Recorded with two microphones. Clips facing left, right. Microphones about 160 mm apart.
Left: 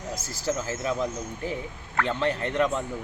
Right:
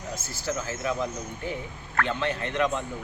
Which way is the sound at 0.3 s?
35° left (ahead or behind).